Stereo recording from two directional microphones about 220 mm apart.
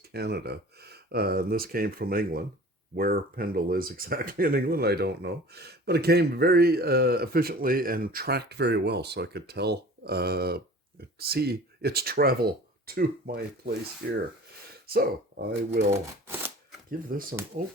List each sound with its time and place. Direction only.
0.1 s speech: 45° right (ahead or behind)
15.9 s speech: 10° right (ahead or behind)
17.1 s speech: 40° right (ahead or behind)